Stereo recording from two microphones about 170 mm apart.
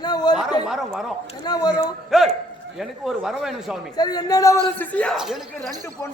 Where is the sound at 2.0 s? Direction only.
Centre (ahead or behind).